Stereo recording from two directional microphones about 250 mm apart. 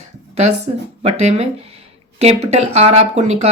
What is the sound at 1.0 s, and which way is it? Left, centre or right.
Speech, right.